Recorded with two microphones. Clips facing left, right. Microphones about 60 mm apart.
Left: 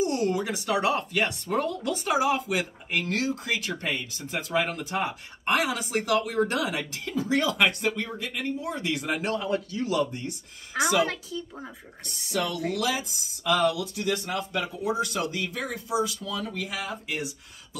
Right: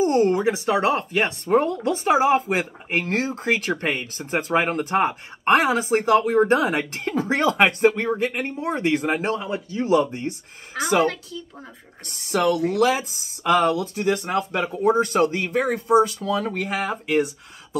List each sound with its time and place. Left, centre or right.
0.0 s speech: right
9.3 s a man's voice: right
10.8 s speech: centre
12.1 s speech: right